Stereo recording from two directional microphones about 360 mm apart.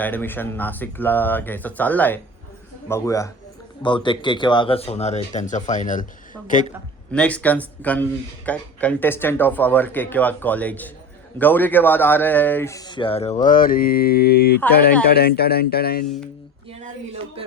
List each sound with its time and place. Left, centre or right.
0.0 s a man's voice: centre; by 6.7 s left
7.1 s a man's voice: centre; by 16.0 s left